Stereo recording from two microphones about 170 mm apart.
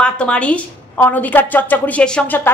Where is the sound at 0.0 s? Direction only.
5° left (ahead or behind).